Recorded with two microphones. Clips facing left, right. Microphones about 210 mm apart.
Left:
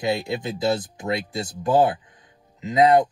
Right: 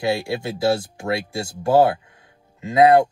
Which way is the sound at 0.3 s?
20° left (ahead or behind).